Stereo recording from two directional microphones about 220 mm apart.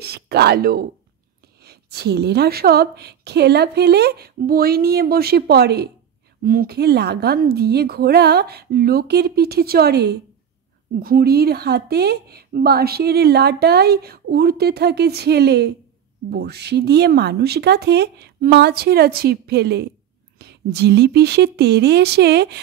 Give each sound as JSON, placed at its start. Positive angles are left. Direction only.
{"t": 0.0, "sound": "a woman's voice", "side_deg": -45}